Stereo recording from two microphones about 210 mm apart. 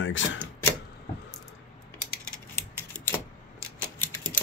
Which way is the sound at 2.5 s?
10° left (ahead or behind).